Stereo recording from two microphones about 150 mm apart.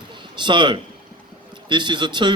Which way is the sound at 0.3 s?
30° right (ahead or behind).